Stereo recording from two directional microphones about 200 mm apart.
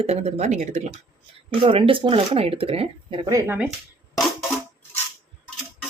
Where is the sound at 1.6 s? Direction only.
25° right (ahead or behind).